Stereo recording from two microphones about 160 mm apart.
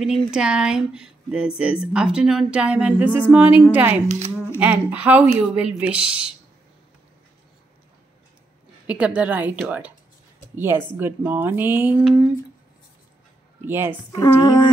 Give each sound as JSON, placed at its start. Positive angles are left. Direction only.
{"t": 0.0, "sound": "speech", "side_deg": -5}
{"t": 8.8, "sound": "speech", "side_deg": -10}
{"t": 13.6, "sound": "speech", "side_deg": -15}
{"t": 14.1, "sound": "speech", "side_deg": 25}